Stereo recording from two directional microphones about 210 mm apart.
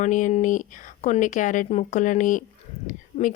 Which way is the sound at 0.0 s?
35° left (ahead or behind).